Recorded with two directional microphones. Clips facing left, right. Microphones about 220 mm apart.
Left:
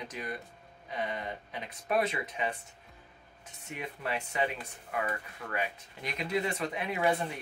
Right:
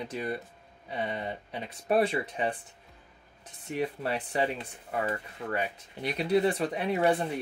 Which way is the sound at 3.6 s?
35° right (ahead or behind).